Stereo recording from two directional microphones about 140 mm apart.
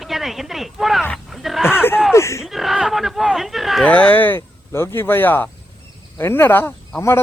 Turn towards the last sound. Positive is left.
turn(degrees=20)  # may be behind; listen again after turning